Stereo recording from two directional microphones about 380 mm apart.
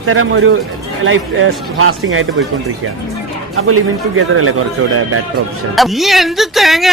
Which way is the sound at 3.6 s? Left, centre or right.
Right.